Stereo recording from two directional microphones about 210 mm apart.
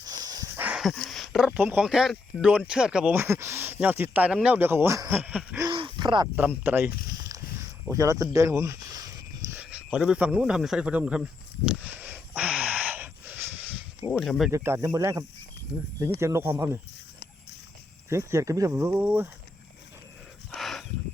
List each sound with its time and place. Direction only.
0.1 s speech: 20° right (ahead or behind)
5.6 s a sound: 20° right (ahead or behind)
6.6 s speech: 10° right (ahead or behind)
7.1 s a sound: 15° right (ahead or behind)
7.9 s speech: 15° right (ahead or behind)
9.5 s snake: 5° right (ahead or behind)
14.5 s speech: 15° right (ahead or behind)
18.1 s speech: 15° right (ahead or behind)
20.5 s a sound: centre (ahead or behind)